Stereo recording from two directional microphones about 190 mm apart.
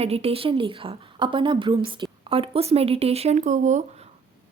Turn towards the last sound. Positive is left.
turn(degrees=-40)  # may be behind; listen again after turning